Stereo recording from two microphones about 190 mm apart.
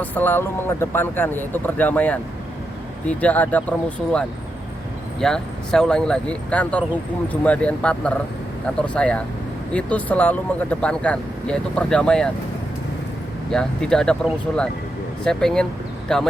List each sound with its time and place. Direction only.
0.0 s speech: 10° left (ahead or behind)
13.5 s speech: 5° left (ahead or behind)